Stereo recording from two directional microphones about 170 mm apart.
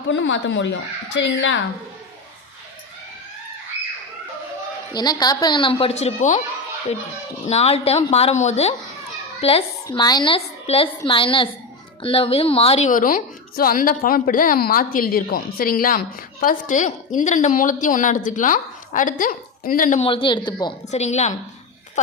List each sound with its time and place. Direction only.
0.1 s speech: 90° left
4.9 s a woman's voice: 25° left (ahead or behind)
5.8 s speech: 40° left (ahead or behind)
7.4 s speech: 35° left (ahead or behind)
9.8 s a woman's voice: 25° left (ahead or behind); by 20.0 s 55° left (ahead or behind)
20.0 s a woman's voice: 30° left (ahead or behind)
20.9 s speech: 40° left (ahead or behind)